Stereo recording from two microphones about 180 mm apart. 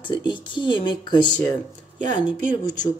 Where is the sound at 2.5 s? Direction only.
20° left (ahead or behind).